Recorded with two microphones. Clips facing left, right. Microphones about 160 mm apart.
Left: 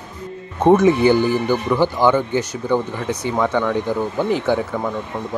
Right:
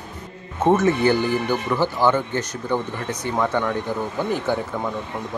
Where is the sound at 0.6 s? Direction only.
15° left (ahead or behind).